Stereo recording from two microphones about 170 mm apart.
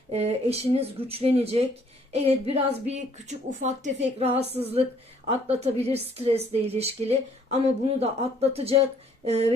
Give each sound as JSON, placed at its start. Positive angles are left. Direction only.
{"t": 0.1, "sound": "a woman's voice", "side_deg": -35}